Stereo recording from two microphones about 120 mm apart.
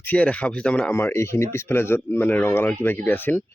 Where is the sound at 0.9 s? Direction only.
20° left (ahead or behind).